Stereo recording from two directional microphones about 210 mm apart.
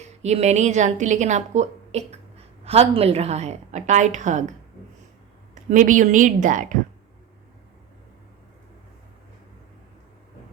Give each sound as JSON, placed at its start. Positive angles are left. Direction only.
{"t": 0.2, "sound": "a woman's voice", "side_deg": -30}
{"t": 5.7, "sound": "a woman's voice", "side_deg": -40}